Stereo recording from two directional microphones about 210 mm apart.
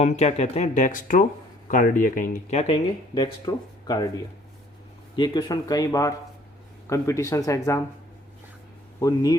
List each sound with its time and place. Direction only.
0.0 s speech: 30° left (ahead or behind)
5.1 s speech: 20° left (ahead or behind)
9.0 s speech: 15° left (ahead or behind)